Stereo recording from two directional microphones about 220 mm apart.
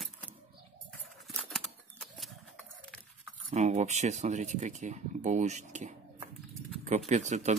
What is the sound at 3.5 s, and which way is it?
Speech, 30° right (ahead or behind).